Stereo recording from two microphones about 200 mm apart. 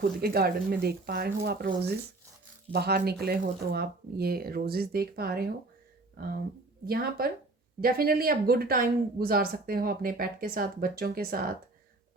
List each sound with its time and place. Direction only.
0.0 s speech: 50° right (ahead or behind)
2.7 s speech: 50° right (ahead or behind)